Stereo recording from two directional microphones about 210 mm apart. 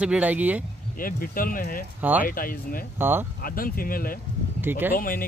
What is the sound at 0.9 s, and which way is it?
Speech, 45° left (ahead or behind).